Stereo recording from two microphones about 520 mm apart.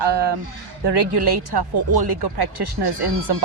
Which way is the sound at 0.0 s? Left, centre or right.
Right.